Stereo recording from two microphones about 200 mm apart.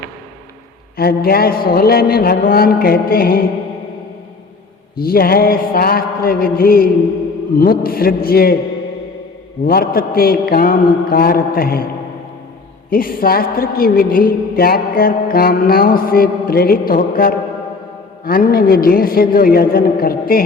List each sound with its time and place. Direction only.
0.9 s a woman's voice: 50° left (ahead or behind)
4.9 s a woman's voice: 50° left (ahead or behind)
9.6 s a woman's voice: 45° left (ahead or behind)
12.9 s a woman's voice: 45° left (ahead or behind)